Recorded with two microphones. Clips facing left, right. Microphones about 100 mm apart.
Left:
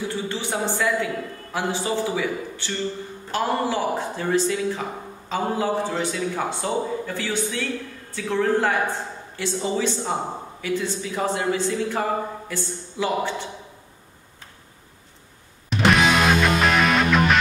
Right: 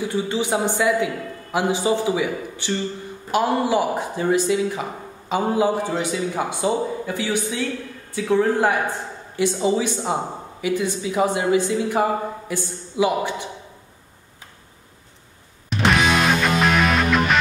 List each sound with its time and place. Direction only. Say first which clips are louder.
0.3 s speech: right 4 dB; 15° right (ahead or behind)
15.7 s music: even; centre (ahead or behind)